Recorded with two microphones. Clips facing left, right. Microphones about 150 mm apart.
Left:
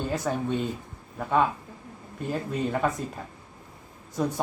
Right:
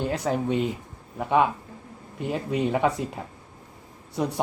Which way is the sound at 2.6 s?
15° right (ahead or behind).